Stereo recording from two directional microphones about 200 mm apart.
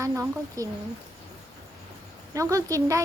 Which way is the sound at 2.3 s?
15° right (ahead or behind).